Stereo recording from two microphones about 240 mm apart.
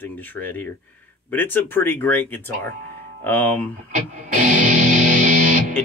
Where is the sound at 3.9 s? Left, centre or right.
Right.